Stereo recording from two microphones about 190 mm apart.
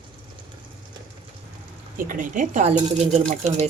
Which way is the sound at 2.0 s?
45° right (ahead or behind).